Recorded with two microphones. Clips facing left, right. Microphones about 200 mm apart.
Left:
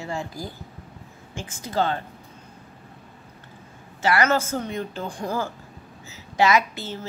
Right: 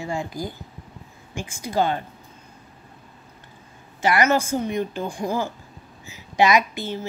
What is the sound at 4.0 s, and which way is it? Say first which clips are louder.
A woman's voice: right 2 dB; 15° right (ahead or behind).